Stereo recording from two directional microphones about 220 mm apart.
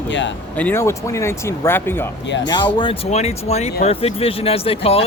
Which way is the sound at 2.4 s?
20° left (ahead or behind).